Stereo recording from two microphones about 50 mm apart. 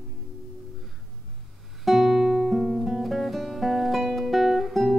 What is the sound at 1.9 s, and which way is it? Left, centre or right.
Guitar, centre.